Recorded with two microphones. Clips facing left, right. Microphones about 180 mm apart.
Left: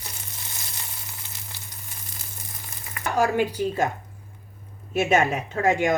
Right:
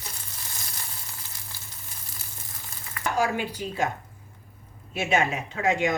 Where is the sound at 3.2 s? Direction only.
50° left (ahead or behind).